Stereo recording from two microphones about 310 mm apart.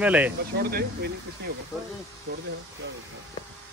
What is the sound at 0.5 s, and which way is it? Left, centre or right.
Speech, right.